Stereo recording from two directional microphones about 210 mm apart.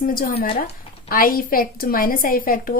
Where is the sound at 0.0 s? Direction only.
45° left (ahead or behind).